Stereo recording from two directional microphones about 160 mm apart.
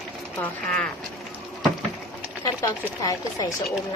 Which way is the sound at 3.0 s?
20° left (ahead or behind).